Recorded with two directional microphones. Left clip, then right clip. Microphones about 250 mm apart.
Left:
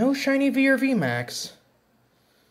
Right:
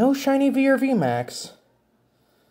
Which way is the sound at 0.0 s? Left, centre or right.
Right.